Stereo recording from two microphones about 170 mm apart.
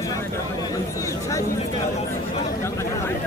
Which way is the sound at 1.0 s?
20° left (ahead or behind).